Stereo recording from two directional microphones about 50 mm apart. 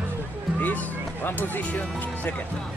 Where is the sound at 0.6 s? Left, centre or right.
Left.